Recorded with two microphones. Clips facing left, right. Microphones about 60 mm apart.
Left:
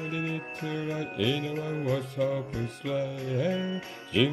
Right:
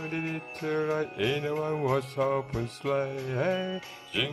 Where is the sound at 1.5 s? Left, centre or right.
Right.